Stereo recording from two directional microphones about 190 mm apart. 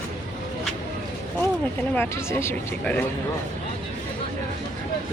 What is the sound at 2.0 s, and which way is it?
Speech, 10° left (ahead or behind).